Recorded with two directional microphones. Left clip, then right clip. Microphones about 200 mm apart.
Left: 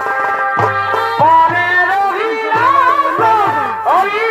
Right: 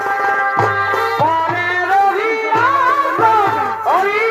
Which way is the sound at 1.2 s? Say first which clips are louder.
Left 6 dB; 15° left (ahead or behind).